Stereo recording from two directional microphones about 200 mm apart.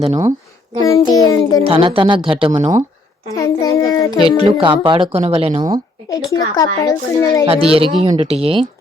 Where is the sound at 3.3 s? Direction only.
15° left (ahead or behind).